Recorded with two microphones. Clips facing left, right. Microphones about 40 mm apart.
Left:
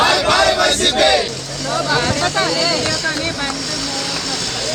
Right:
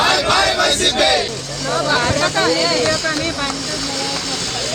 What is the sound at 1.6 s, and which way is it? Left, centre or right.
Vehicle, right.